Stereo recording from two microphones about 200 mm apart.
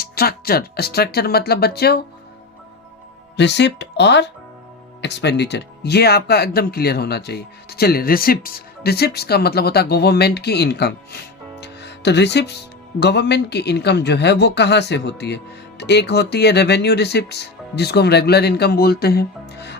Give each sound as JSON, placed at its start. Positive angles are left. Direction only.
{"t": 0.0, "sound": "speech", "side_deg": 50}
{"t": 3.3, "sound": "speech", "side_deg": 60}